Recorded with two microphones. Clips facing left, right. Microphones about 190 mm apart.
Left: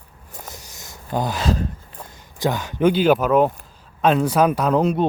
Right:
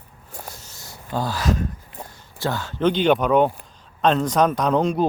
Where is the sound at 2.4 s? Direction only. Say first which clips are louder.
Left 3 dB; 15° left (ahead or behind).